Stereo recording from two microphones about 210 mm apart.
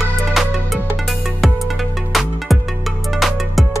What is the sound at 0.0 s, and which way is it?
Music, centre (ahead or behind).